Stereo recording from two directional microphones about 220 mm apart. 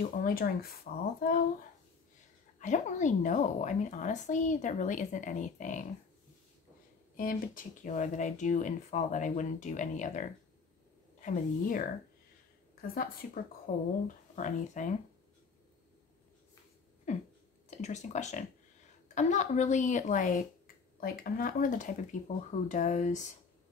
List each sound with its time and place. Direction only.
0.0 s speech: 40° left (ahead or behind)
2.6 s speech: 35° left (ahead or behind)
7.2 s speech: 40° left (ahead or behind)
12.8 s speech: 40° left (ahead or behind)
17.1 s speech: 30° left (ahead or behind)